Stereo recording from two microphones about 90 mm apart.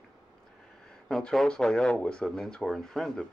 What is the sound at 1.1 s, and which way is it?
Speech, 5° left (ahead or behind).